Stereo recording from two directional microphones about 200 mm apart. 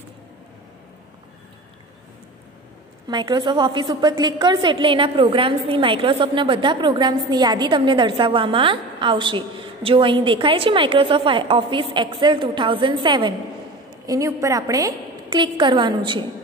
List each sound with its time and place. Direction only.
3.1 s a woman's voice: 25° right (ahead or behind)